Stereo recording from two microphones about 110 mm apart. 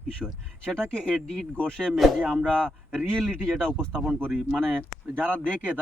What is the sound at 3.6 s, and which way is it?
Ding, 5° left (ahead or behind).